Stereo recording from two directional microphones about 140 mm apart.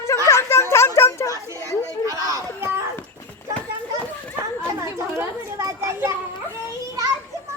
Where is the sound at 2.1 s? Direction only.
25° right (ahead or behind).